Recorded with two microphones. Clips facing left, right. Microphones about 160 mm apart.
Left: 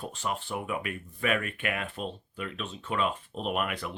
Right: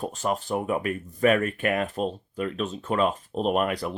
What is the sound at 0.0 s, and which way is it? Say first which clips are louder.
Speech: right 6 dB; 45° right (ahead or behind).